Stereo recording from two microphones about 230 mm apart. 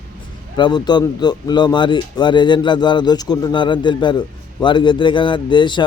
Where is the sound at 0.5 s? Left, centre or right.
Centre.